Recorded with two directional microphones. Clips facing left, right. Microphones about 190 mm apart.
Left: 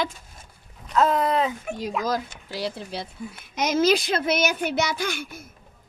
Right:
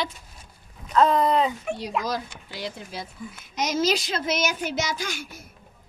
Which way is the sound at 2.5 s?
40° left (ahead or behind).